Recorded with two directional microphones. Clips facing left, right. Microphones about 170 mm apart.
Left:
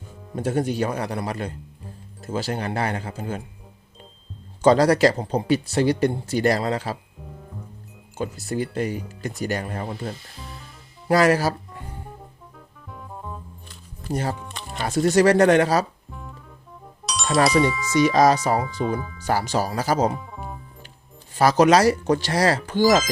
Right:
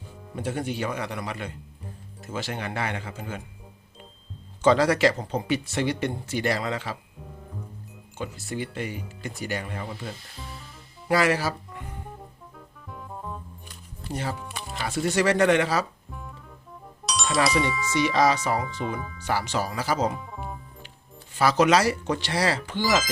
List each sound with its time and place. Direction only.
0.3 s speech: 40° left (ahead or behind)
4.6 s speech: 40° left (ahead or behind)
8.2 s speech: 40° left (ahead or behind)
12.5 s music: centre (ahead or behind)
14.1 s speech: 45° left (ahead or behind)
17.1 s speech: centre (ahead or behind)
18.0 s speech: 40° left (ahead or behind)
18.9 s speech: centre (ahead or behind)
19.2 s speech: 40° left (ahead or behind)
20.1 s music: centre (ahead or behind)
21.3 s speech: 40° left (ahead or behind)